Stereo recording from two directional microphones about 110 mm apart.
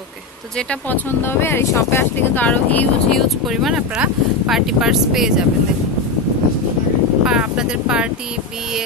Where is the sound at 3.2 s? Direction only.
Centre (ahead or behind).